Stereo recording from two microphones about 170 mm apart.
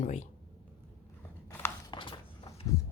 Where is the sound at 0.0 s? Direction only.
45° left (ahead or behind).